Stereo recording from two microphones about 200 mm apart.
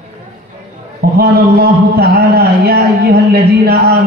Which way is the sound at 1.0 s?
50° right (ahead or behind).